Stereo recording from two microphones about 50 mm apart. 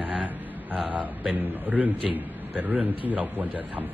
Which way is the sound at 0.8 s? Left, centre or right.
Right.